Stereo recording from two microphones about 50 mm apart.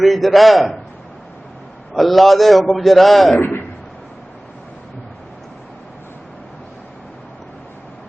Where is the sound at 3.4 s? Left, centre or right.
Left.